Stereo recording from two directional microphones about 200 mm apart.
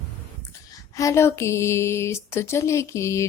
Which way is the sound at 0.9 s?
15° left (ahead or behind).